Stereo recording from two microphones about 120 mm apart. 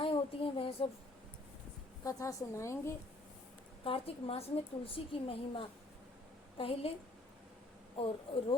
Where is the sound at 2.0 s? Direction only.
25° left (ahead or behind).